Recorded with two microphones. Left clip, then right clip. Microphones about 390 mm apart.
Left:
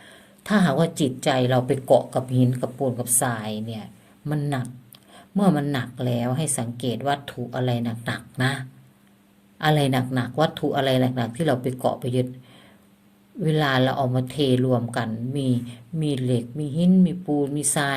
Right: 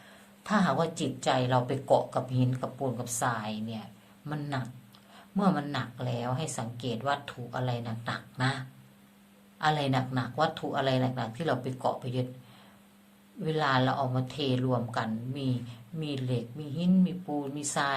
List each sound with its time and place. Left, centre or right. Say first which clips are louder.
0.4 s speech: left 6 dB; left
13.4 s speech: left 6 dB; left